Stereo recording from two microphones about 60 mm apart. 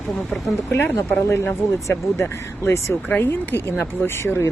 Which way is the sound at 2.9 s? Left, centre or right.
Left.